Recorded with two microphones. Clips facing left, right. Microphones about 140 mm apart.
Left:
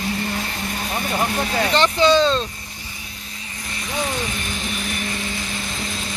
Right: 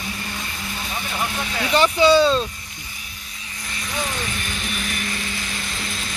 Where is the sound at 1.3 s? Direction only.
40° left (ahead or behind).